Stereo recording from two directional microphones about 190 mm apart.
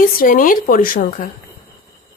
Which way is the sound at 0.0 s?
50° left (ahead or behind).